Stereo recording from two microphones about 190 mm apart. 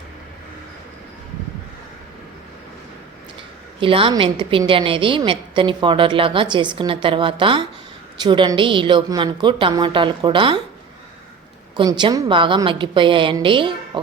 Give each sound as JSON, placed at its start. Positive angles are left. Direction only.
{"t": 3.8, "sound": "a woman's voice", "side_deg": -30}
{"t": 11.8, "sound": "a woman's voice", "side_deg": -25}